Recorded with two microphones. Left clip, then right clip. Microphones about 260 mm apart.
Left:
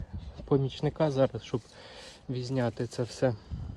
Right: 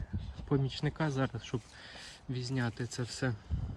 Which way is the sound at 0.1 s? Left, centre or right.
Centre.